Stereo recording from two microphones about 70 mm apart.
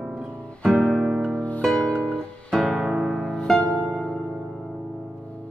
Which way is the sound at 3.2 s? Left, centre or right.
Centre.